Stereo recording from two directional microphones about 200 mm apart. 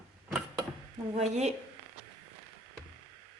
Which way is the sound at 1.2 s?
35° right (ahead or behind).